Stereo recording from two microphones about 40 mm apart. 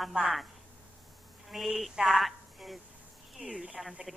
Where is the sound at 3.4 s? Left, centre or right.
Right.